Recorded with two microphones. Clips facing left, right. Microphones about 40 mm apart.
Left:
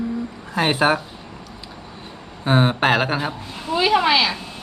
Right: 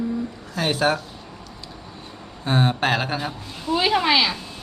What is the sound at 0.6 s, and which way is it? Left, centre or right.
Speech, left.